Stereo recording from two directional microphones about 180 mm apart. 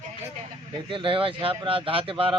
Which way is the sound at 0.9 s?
30° right (ahead or behind).